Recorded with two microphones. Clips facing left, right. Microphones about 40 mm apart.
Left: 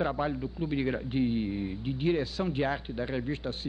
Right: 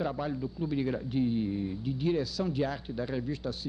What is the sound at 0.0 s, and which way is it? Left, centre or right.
Speech, left.